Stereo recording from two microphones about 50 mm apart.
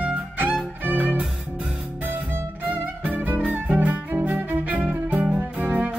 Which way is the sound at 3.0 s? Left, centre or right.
Right.